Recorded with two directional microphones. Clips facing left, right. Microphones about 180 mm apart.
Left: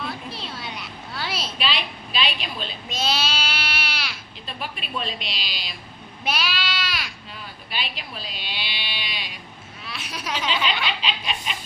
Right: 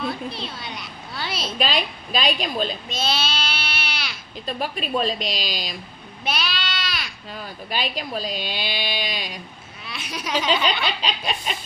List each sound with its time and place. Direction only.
1.1 s a sound: 5° left (ahead or behind)
1.5 s speech: 45° right (ahead or behind)
2.9 s goat: 10° left (ahead or behind)
4.4 s a woman's voice: 40° right (ahead or behind)
6.2 s a sound: 10° left (ahead or behind)
7.3 s speech: 40° right (ahead or behind)
9.8 s speech: centre (ahead or behind)
10.3 s a woman's voice: 40° right (ahead or behind)